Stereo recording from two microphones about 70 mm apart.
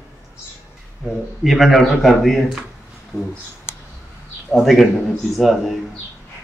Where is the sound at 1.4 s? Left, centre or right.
Centre.